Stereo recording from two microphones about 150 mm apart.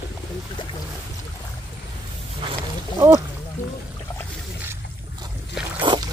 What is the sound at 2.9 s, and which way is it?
Speech, 20° right (ahead or behind).